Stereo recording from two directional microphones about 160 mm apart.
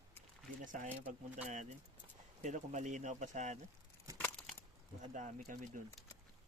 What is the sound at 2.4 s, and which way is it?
Speech, 50° right (ahead or behind).